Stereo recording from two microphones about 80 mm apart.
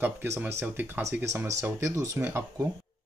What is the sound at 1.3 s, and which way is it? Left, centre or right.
Speech, right.